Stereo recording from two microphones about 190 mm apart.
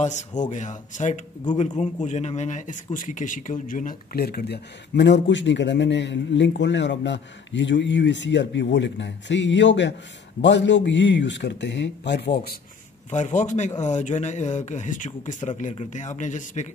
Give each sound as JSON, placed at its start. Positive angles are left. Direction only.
{"t": 0.5, "sound": "a man's voice", "side_deg": 40}
{"t": 13.1, "sound": "speech", "side_deg": 40}